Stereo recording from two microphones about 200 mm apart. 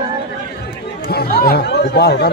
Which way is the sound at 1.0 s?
50° left (ahead or behind).